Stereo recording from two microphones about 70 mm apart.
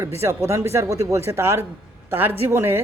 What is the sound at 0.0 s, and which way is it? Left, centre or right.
Speech, right.